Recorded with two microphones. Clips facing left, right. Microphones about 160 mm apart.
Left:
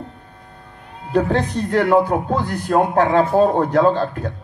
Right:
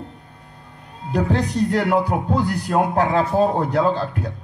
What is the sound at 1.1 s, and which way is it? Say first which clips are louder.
A man's voice: left 2 dB; 40° left (ahead or behind).